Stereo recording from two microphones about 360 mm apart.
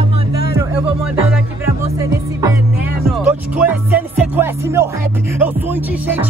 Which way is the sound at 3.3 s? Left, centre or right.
Centre.